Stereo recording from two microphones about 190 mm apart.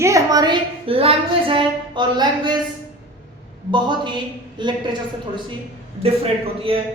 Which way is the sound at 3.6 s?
25° right (ahead or behind).